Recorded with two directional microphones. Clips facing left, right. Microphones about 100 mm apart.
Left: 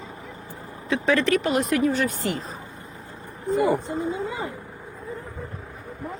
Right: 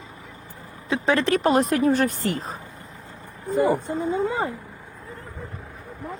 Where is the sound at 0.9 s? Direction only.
30° right (ahead or behind); by 2.5 s 50° right (ahead or behind).